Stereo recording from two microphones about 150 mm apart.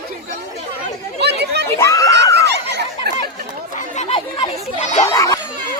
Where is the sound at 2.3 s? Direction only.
90° right.